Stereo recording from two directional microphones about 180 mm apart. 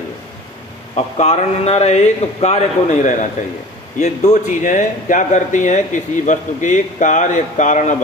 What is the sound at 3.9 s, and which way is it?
Speech, 40° left (ahead or behind).